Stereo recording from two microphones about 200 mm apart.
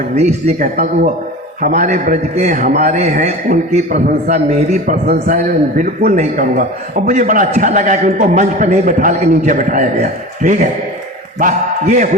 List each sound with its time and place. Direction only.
0.2 s a man's voice: 35° right (ahead or behind)
5.0 s a man's voice: 50° right (ahead or behind)
5.4 s a man's voice: 40° right (ahead or behind)